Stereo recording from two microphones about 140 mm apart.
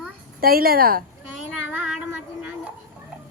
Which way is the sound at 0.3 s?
90° right.